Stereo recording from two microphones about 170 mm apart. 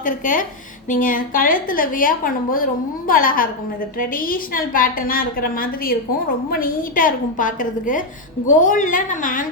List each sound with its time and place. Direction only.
0.0 s a woman's voice: 55° left (ahead or behind)